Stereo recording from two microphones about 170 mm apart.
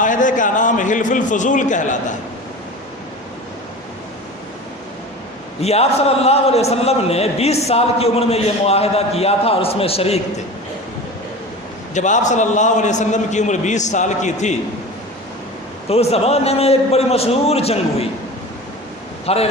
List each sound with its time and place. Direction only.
0.0 s a man's voice: 50° left (ahead or behind)
5.5 s a man's voice: 40° left (ahead or behind)
11.9 s a man's voice: 45° left (ahead or behind)
15.9 s a man's voice: 35° left (ahead or behind)
19.2 s speech: 35° left (ahead or behind)